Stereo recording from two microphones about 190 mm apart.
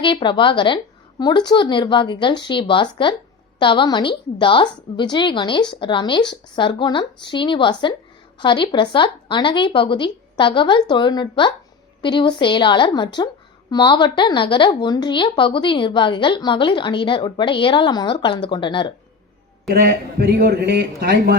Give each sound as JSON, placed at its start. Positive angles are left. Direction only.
{"t": 0.0, "sound": "a woman's voice", "side_deg": 25}
{"t": 19.6, "sound": "a man's voice", "side_deg": -50}